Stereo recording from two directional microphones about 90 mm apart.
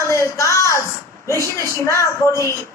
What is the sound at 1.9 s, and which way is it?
Speech, 35° left (ahead or behind).